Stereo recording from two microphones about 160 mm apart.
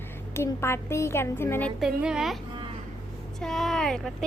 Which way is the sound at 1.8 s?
5° right (ahead or behind).